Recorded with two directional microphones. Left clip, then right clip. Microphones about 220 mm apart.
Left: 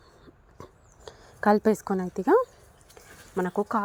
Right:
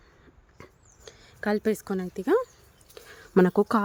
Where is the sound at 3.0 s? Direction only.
25° right (ahead or behind).